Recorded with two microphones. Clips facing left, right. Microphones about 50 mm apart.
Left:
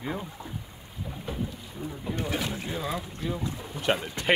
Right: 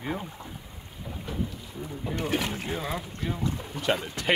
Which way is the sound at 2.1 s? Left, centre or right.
Right.